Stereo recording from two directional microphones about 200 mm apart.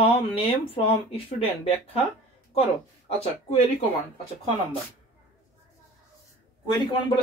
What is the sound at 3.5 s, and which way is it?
Speech, 30° left (ahead or behind).